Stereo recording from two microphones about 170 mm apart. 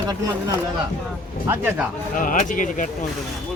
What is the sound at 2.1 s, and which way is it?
Speech, 50° left (ahead or behind).